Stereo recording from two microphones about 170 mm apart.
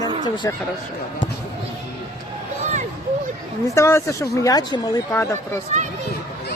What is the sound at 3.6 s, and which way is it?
A woman's voice, 15° left (ahead or behind).